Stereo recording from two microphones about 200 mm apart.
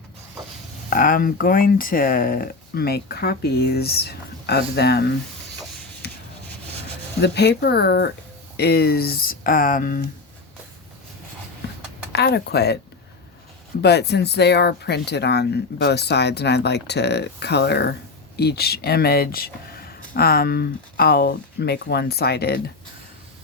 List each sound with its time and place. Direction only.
0.9 s speech: 45° left (ahead or behind)
6.0 s a sound: 55° left (ahead or behind)
7.2 s speech: 55° left (ahead or behind)
12.1 s speech: 55° left (ahead or behind)
13.8 s speech: 55° left (ahead or behind)